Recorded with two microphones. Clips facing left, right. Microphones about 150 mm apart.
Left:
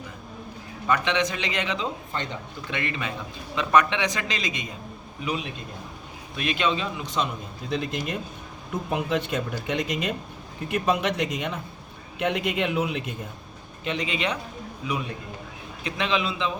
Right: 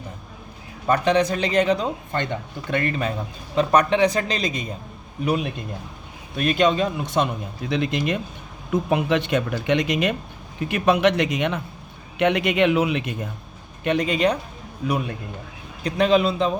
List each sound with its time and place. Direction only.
0.9 s a man's voice: 40° right (ahead or behind)
2.1 s a man's voice: 50° right (ahead or behind)
5.2 s speech: 50° right (ahead or behind)
7.7 s speech: 75° right (ahead or behind)
13.8 s speech: 50° right (ahead or behind)
15.8 s a man's voice: 40° right (ahead or behind)